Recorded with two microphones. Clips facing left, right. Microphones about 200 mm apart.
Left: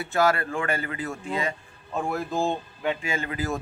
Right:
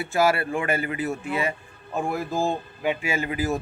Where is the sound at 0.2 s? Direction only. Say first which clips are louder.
Right 1 dB; 15° right (ahead or behind).